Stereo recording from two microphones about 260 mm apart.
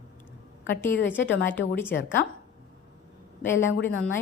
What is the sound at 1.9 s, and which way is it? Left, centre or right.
Speech, left.